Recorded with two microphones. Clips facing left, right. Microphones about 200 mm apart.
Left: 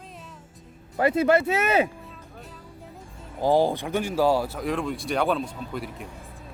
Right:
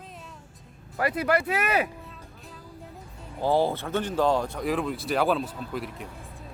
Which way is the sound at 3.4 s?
15° left (ahead or behind).